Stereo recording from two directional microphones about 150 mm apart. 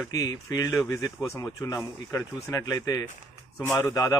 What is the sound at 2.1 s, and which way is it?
Speech, 20° left (ahead or behind).